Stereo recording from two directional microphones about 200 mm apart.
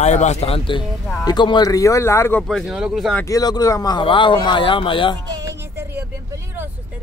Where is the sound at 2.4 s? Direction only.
Centre (ahead or behind).